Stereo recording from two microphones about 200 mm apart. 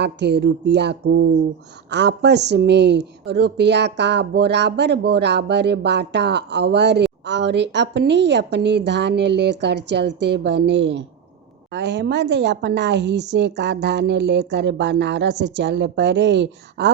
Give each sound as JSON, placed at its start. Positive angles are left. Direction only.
{"t": 0.0, "sound": "speech", "side_deg": -55}